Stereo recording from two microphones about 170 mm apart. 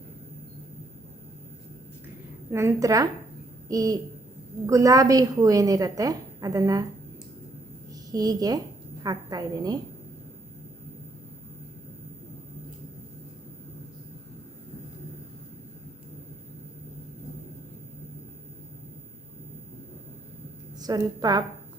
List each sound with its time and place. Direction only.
2.5 s a woman's voice: 15° right (ahead or behind)
8.1 s a woman's voice: 20° right (ahead or behind)
20.8 s a woman's voice: 25° right (ahead or behind)